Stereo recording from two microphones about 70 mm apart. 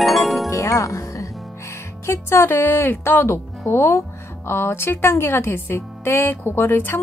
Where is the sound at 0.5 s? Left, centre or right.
Left.